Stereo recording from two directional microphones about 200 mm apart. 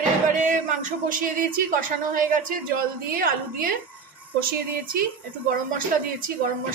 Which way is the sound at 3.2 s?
45° right (ahead or behind).